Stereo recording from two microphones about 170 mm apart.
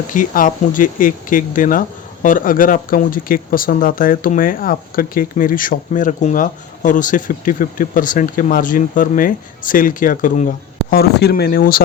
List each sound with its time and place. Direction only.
0.1 s speech: 50° left (ahead or behind)
10.9 s speech: 70° left (ahead or behind)